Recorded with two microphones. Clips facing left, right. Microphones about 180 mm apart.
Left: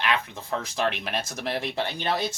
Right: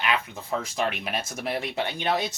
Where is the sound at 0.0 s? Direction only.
5° right (ahead or behind).